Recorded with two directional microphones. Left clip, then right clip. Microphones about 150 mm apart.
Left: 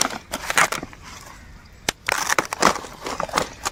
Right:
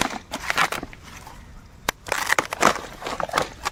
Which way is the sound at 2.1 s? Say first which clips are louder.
Right 1 dB; 90° left.